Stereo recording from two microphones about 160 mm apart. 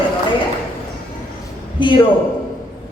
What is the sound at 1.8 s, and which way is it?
Speech, 30° left (ahead or behind).